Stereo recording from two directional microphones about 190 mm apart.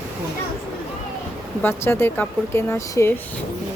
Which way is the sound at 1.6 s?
10° left (ahead or behind).